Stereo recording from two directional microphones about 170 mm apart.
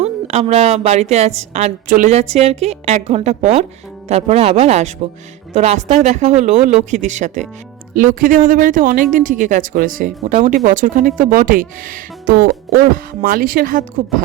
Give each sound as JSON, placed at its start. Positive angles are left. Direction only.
{"t": 0.0, "sound": "a woman's voice", "side_deg": -40}